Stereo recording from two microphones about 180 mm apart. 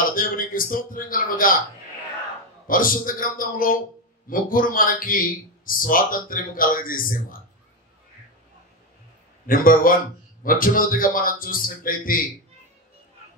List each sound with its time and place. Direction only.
0.1 s a man's voice: 50° left (ahead or behind)
2.6 s speech: 50° left (ahead or behind)
9.5 s speech: 50° left (ahead or behind)